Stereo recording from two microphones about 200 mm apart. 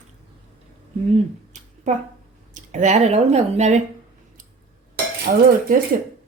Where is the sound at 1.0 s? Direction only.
35° right (ahead or behind).